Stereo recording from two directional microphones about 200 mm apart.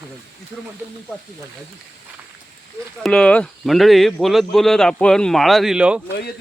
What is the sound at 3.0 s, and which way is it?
Speech, 5° left (ahead or behind).